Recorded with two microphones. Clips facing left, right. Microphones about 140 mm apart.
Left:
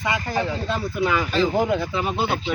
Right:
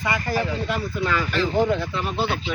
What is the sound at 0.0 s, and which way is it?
Speech, 20° left (ahead or behind).